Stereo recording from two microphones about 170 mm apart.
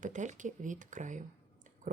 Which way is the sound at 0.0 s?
45° right (ahead or behind).